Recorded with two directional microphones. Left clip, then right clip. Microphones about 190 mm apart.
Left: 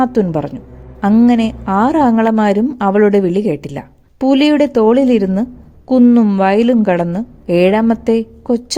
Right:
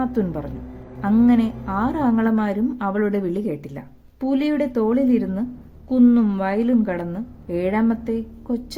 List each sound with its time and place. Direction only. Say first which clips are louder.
0.0 s a woman's voice: left 10 dB; 40° left (ahead or behind)